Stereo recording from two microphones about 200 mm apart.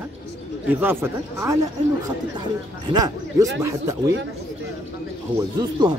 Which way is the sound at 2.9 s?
20° right (ahead or behind).